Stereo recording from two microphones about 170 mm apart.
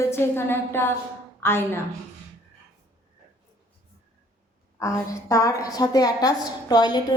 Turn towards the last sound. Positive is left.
turn(degrees=25)  # may be behind; listen again after turning